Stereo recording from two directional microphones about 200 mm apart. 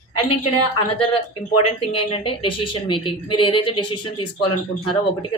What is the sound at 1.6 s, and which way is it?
Speech, 25° left (ahead or behind).